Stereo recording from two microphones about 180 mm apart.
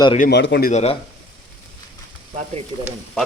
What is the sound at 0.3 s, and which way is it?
Speech, 70° left (ahead or behind).